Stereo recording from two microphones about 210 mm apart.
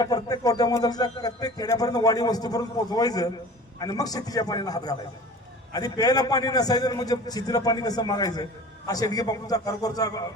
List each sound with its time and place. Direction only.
0.0 s speech: 15° left (ahead or behind)